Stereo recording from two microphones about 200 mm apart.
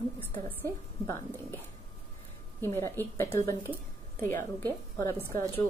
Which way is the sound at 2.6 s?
10° left (ahead or behind).